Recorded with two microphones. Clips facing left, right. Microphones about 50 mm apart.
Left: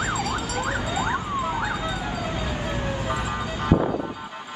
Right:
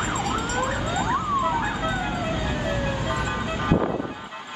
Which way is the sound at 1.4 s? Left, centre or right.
Right.